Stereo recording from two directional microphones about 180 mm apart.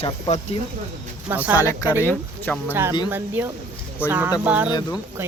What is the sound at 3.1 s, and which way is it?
Speech, 10° right (ahead or behind).